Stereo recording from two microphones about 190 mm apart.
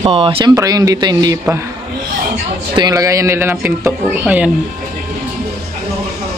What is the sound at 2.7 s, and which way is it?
A man's voice, 20° right (ahead or behind).